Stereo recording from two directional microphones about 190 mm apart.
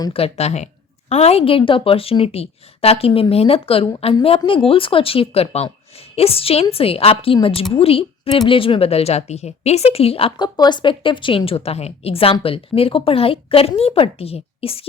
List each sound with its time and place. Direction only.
0.0 s a woman's voice: 30° left (ahead or behind)